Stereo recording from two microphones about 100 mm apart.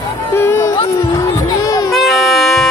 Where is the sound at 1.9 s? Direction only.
Centre (ahead or behind).